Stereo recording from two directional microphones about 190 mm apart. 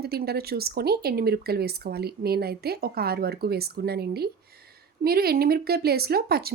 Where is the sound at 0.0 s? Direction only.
55° right (ahead or behind).